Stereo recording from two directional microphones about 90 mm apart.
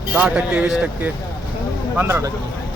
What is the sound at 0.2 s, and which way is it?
A man's voice, 15° right (ahead or behind).